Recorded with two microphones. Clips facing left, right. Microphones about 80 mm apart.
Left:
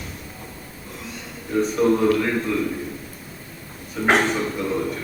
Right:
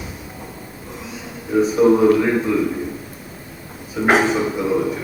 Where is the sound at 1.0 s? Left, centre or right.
Centre.